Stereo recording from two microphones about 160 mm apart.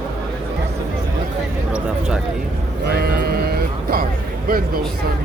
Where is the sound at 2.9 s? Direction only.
75° right (ahead or behind).